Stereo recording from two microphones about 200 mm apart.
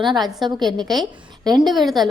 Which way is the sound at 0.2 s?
Centre (ahead or behind).